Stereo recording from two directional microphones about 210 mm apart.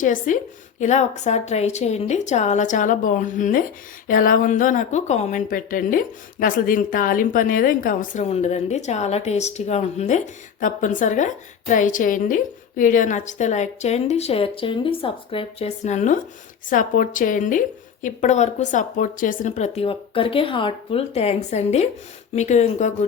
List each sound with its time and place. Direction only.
0.0 s a woman's voice: 40° left (ahead or behind)